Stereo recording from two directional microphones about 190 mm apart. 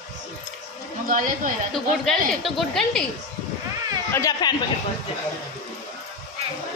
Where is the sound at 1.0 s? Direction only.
45° right (ahead or behind).